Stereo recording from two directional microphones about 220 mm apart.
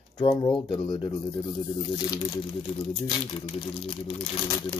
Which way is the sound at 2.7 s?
25° left (ahead or behind).